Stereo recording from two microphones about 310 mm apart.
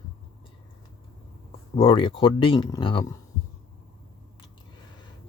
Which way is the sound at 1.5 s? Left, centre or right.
Centre.